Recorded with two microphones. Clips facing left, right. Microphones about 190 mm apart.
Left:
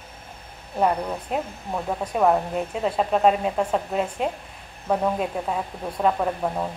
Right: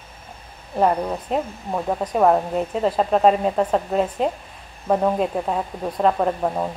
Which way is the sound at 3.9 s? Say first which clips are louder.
Right 5 dB; 40° right (ahead or behind).